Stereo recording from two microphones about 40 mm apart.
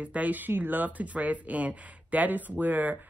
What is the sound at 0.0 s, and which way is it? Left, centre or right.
Speech, right.